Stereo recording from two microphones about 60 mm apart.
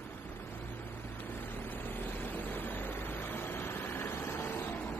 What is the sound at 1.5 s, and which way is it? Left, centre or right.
Vehicle, left.